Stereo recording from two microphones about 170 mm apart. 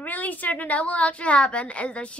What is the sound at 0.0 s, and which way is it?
A woman's voice, 10° left (ahead or behind).